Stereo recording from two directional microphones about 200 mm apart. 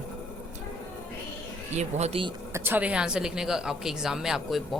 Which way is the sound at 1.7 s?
30° right (ahead or behind).